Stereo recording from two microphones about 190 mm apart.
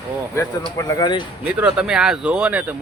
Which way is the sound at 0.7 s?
20° left (ahead or behind).